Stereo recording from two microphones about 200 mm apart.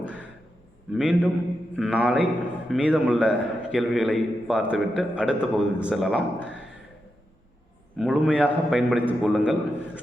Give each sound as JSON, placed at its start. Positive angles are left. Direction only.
{"t": 0.9, "sound": "a man's voice", "side_deg": -5}
{"t": 7.9, "sound": "a man's voice", "side_deg": -5}